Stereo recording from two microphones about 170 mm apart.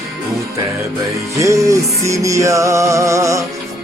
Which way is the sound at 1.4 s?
20° right (ahead or behind).